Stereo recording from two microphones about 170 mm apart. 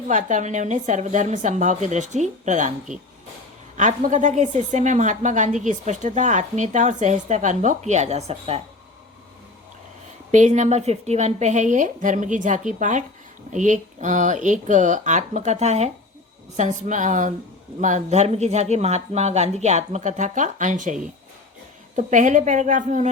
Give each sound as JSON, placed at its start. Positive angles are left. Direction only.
{"t": 0.1, "sound": "a woman's voice", "side_deg": -45}
{"t": 3.8, "sound": "a woman's voice", "side_deg": -45}
{"t": 10.3, "sound": "a woman's voice", "side_deg": -45}